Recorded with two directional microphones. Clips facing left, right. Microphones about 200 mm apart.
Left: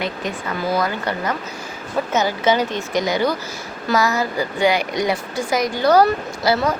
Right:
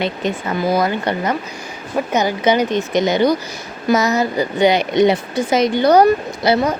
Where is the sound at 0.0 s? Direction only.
25° right (ahead or behind).